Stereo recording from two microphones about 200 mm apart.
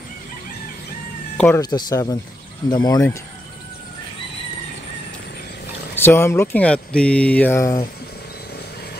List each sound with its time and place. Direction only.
1.3 s cat: 5° left (ahead or behind)
1.6 s speech: 20° left (ahead or behind)
6.0 s speech: 10° left (ahead or behind)